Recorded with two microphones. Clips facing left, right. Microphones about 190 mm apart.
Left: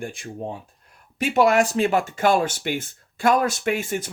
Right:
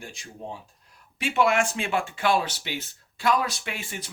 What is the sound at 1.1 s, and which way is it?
Speech, 40° left (ahead or behind).